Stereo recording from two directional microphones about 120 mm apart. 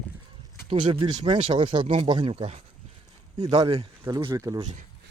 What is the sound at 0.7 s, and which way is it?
Speech, 45° right (ahead or behind).